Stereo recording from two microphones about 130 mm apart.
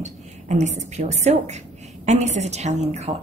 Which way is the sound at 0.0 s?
65° right (ahead or behind).